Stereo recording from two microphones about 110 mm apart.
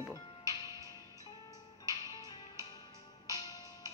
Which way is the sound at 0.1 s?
35° left (ahead or behind).